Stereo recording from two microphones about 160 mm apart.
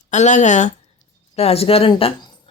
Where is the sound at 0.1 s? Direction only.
50° left (ahead or behind).